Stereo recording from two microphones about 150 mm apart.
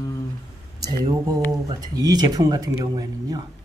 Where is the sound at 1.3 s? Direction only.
25° right (ahead or behind).